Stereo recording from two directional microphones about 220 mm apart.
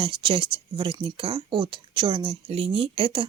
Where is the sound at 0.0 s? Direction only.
25° right (ahead or behind).